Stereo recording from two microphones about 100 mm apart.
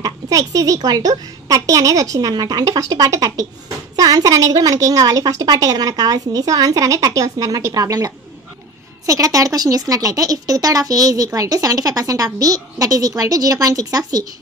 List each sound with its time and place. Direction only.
0.0 s a woman's voice: 35° right (ahead or behind)